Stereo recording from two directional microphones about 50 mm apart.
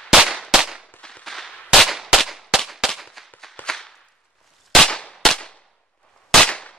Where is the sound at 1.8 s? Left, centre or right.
Centre.